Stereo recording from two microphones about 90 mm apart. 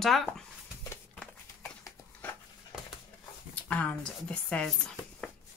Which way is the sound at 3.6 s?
15° left (ahead or behind).